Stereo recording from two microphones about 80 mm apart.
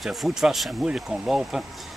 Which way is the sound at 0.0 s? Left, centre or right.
Centre.